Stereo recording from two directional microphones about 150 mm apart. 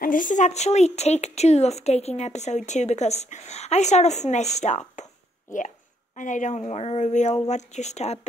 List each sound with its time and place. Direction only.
0.0 s speech: 65° left (ahead or behind)
6.1 s speech: 55° left (ahead or behind)